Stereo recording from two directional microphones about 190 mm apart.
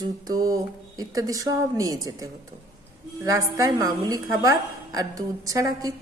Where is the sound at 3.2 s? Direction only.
15° right (ahead or behind).